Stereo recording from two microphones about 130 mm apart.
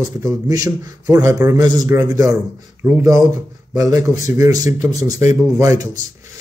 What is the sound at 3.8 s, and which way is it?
Speech, 30° right (ahead or behind).